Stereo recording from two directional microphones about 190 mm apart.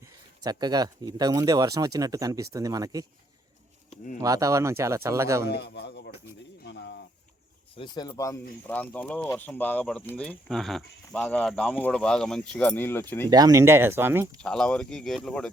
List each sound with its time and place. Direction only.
0.4 s speech: 20° right (ahead or behind)
3.8 s a sound: 40° left (ahead or behind)
4.2 s speech: 15° right (ahead or behind)
5.5 s a man's voice: 60° left (ahead or behind)
6.6 s bird: 65° left (ahead or behind)
7.8 s speech: 20° left (ahead or behind)
8.6 s speech: 10° left (ahead or behind)
13.3 s speech: 20° right (ahead or behind)
14.4 s speech: 5° left (ahead or behind)